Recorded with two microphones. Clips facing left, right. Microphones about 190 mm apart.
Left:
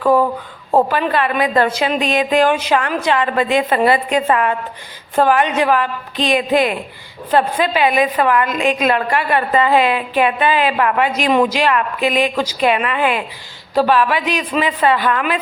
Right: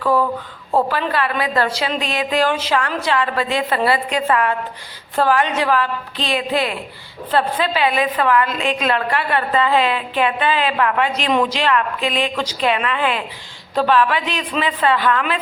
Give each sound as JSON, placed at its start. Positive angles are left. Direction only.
{"t": 0.8, "sound": "a woman's voice", "side_deg": 15}